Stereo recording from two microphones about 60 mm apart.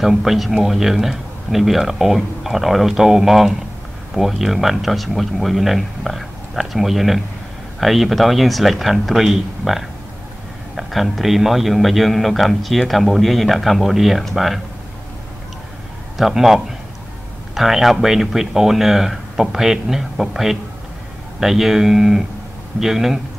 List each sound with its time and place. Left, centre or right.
0.0 s a man's voice: centre
16.2 s a man's voice: centre